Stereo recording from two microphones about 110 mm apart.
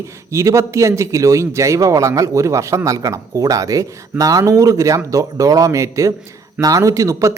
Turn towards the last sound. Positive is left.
turn(degrees=-30)  # may be behind; listen again after turning